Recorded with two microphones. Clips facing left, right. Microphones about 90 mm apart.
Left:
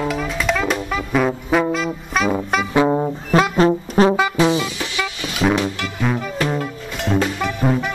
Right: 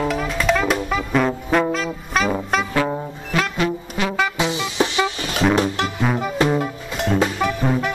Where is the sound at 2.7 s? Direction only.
20° left (ahead or behind).